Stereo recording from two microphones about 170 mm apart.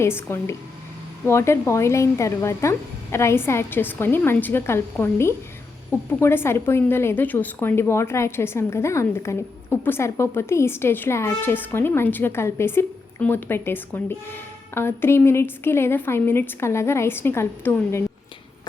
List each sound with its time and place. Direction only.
0.0 s a woman's voice: 15° left (ahead or behind)